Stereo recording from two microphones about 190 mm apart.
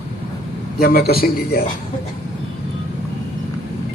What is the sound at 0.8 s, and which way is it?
Speech, 50° left (ahead or behind).